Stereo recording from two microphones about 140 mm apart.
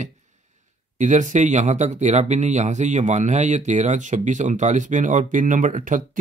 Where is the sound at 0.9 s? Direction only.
60° right (ahead or behind).